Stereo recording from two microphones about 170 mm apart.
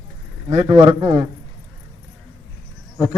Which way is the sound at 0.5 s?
35° right (ahead or behind).